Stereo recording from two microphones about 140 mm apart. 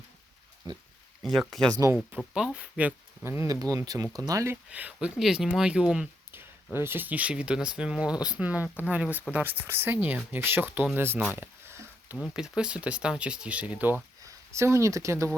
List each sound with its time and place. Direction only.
0.7 s speech: 25° right (ahead or behind)
1.2 s speech: centre (ahead or behind)
1.7 s speech: 25° right (ahead or behind)
2.0 s speech: 5° right (ahead or behind); by 4.5 s 25° right (ahead or behind)
4.7 s speech: 10° right (ahead or behind)
11.3 s a sound: 15° right (ahead or behind)
12.1 s speech: centre (ahead or behind); by 15.3 s 20° right (ahead or behind)